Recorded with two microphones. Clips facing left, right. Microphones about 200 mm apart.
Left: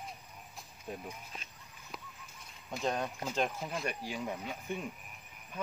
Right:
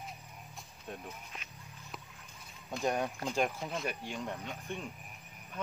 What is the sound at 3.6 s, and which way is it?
Speech, centre (ahead or behind).